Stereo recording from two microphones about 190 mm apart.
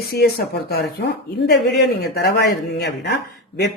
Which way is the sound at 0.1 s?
55° left (ahead or behind).